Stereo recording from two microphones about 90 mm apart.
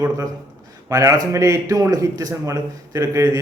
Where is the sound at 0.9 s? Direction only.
35° right (ahead or behind).